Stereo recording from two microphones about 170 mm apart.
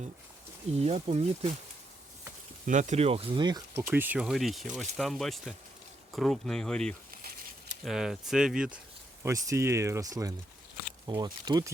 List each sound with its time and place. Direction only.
0.8 s speech: 35° right (ahead or behind)
2.6 s speech: 45° right (ahead or behind); by 3.6 s 25° right (ahead or behind)
3.9 s speech: 10° right (ahead or behind)
7.1 s a sound: 60° right (ahead or behind)
7.9 s speech: centre (ahead or behind)
9.2 s speech: 15° right (ahead or behind)